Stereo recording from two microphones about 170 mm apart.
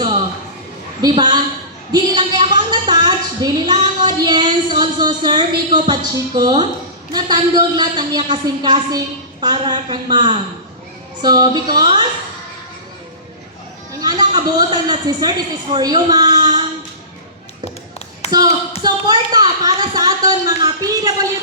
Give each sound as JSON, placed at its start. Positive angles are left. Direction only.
{"t": 1.0, "sound": "a woman's voice", "side_deg": -25}
{"t": 14.0, "sound": "a woman's voice", "side_deg": -25}
{"t": 18.3, "sound": "a woman's voice", "side_deg": -25}